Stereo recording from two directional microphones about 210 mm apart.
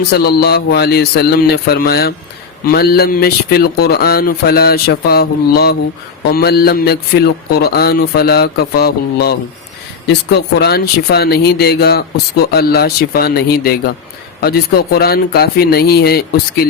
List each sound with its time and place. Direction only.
0.1 s speech: 50° left (ahead or behind)